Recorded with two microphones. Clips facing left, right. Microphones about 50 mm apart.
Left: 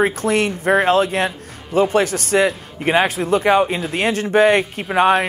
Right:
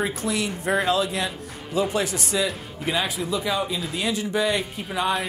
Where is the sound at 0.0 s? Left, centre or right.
Left.